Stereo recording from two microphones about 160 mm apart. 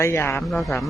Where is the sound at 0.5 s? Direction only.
5° left (ahead or behind).